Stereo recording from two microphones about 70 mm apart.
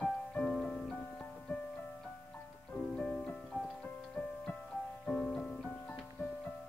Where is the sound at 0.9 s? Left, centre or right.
Left.